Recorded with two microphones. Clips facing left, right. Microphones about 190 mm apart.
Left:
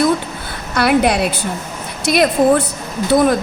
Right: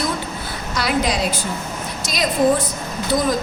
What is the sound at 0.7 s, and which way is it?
A woman's voice, 60° left (ahead or behind).